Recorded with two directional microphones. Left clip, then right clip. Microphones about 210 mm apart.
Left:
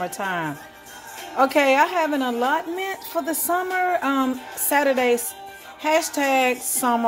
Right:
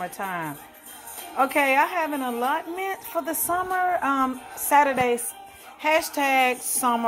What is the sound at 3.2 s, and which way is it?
A woman's voice, 15° left (ahead or behind).